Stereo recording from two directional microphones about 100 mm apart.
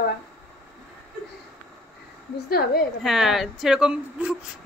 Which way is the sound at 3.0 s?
Centre (ahead or behind).